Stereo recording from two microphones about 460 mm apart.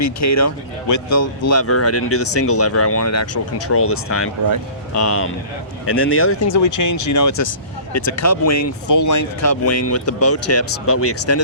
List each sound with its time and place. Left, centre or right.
0.0 s speech: left